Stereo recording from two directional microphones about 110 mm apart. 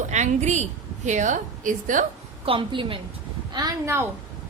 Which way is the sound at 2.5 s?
50° right (ahead or behind).